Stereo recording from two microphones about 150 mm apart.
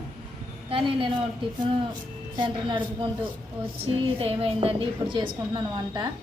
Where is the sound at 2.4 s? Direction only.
35° right (ahead or behind).